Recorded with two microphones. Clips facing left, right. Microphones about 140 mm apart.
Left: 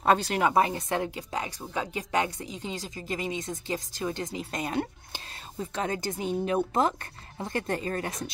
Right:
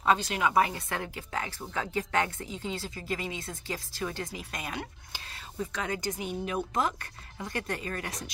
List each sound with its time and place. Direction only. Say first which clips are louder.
0.3 s a woman's voice: left 2 dB; 30° left (ahead or behind)